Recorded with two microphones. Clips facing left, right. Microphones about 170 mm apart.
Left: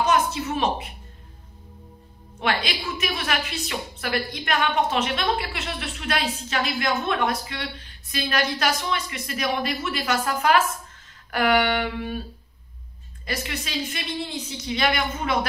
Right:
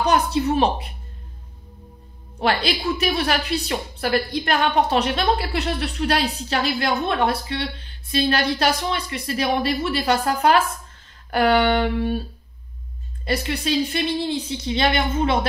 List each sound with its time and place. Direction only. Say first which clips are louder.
0.0 s a sound: right 3 dB; 35° right (ahead or behind)
2.3 s a woman's voice: right 4 dB; 35° right (ahead or behind)
13.2 s speech: right 7 dB; 30° right (ahead or behind)